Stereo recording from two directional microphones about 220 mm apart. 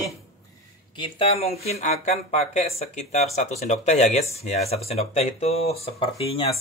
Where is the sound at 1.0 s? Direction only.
25° left (ahead or behind).